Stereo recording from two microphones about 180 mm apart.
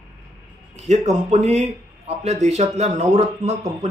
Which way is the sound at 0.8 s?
40° right (ahead or behind).